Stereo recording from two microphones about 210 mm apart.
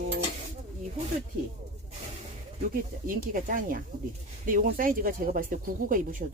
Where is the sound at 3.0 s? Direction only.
40° right (ahead or behind).